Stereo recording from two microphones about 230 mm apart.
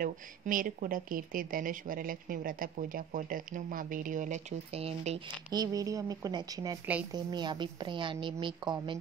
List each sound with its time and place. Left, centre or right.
0.0 s a woman's voice: right
5.5 s a woman's voice: centre